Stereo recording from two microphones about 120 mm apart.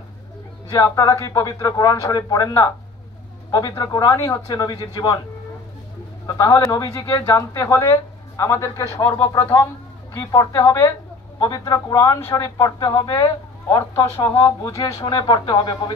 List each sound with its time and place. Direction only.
0.7 s speech: 30° left (ahead or behind)
6.2 s a woman's voice: 30° left (ahead or behind)
13.7 s speech: 25° left (ahead or behind)